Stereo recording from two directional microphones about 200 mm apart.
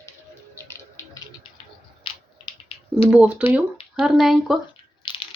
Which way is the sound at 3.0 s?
5° right (ahead or behind).